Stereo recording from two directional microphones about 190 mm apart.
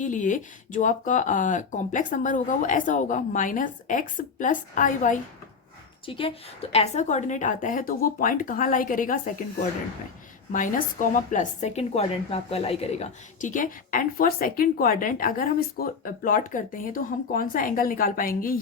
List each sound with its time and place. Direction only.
0.0 s a woman's voice: 40° left (ahead or behind)
6.1 s a woman's voice: 30° left (ahead or behind); by 9.1 s 45° left (ahead or behind)
10.5 s a woman's voice: 45° left (ahead or behind)